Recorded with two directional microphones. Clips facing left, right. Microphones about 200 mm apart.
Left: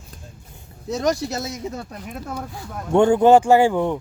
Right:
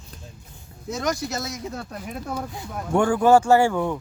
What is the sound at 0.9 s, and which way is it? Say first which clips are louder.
Speech: left 4 dB; 35° left (ahead or behind).